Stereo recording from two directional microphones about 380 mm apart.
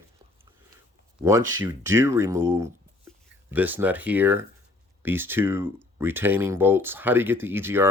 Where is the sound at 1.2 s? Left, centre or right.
Centre.